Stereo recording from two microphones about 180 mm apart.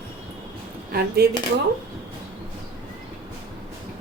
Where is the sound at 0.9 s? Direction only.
60° right (ahead or behind).